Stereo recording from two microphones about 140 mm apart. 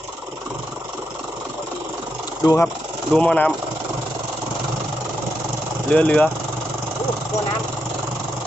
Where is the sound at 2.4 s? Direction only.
20° left (ahead or behind).